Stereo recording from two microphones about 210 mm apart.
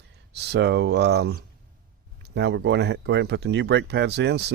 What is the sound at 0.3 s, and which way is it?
Speech, 55° right (ahead or behind).